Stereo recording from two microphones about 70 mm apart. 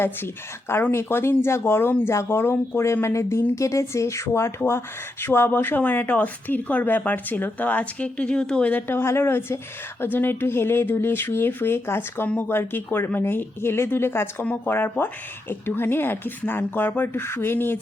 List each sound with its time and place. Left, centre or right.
0.7 s speech: left; by 8.8 s centre
8.9 s speech: left
14.4 s speech: left